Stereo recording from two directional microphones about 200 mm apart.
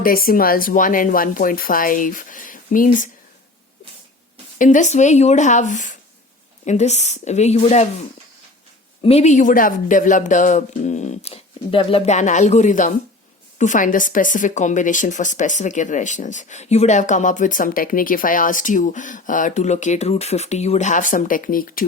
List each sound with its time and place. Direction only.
0.0 s speech: 45° left (ahead or behind)
4.5 s speech: 40° left (ahead or behind)